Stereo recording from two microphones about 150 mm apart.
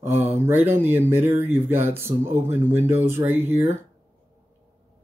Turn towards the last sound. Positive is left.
turn(degrees=-15)  # may be behind; listen again after turning